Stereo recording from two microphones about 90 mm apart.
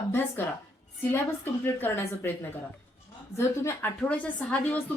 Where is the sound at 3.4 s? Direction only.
30° left (ahead or behind).